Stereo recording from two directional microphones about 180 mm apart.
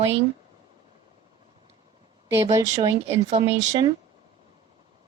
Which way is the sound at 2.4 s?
15° right (ahead or behind).